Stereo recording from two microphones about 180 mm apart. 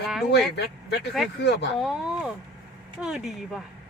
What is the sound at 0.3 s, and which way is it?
Speech, 65° left (ahead or behind).